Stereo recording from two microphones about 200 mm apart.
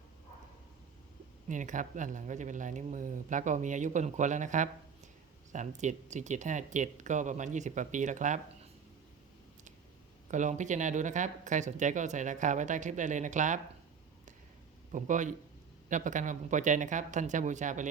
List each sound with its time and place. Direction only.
1.5 s speech: 40° right (ahead or behind)
10.3 s speech: 35° right (ahead or behind)
14.9 s speech: 40° right (ahead or behind)